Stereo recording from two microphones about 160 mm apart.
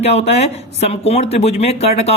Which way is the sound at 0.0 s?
40° left (ahead or behind).